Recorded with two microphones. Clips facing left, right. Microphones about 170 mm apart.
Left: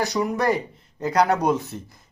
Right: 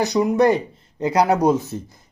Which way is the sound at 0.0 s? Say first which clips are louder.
Right 6 dB; 20° right (ahead or behind).